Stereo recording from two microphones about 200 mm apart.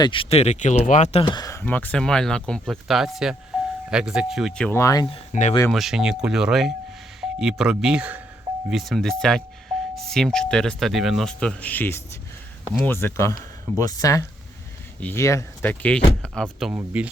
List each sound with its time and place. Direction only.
0.0 s speech: 25° left (ahead or behind)
5.0 s speech: 30° left (ahead or behind)
5.7 s speech: centre (ahead or behind)